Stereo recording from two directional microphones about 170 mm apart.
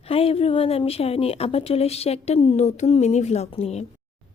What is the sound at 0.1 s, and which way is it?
A woman's voice, 35° left (ahead or behind).